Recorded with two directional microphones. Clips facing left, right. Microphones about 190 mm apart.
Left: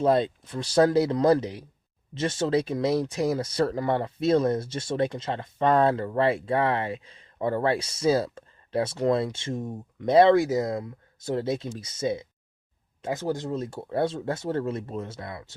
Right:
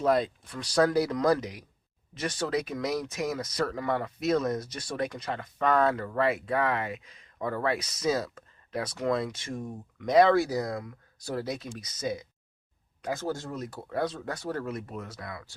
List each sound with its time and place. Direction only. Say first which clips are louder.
0.0 s speech: left 3 dB; 30° left (ahead or behind)